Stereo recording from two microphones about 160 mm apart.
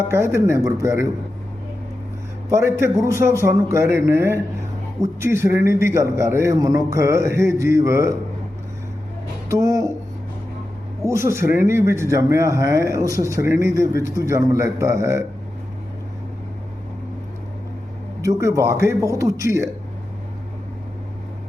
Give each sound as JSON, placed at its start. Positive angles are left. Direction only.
{"t": 0.1, "sound": "a man's voice", "side_deg": -15}
{"t": 2.5, "sound": "a man's voice", "side_deg": -15}
{"t": 9.5, "sound": "speech", "side_deg": -20}
{"t": 11.0, "sound": "speech", "side_deg": -15}
{"t": 18.2, "sound": "speech", "side_deg": -20}